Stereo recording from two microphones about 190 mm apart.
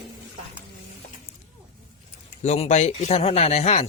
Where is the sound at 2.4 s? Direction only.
35° left (ahead or behind).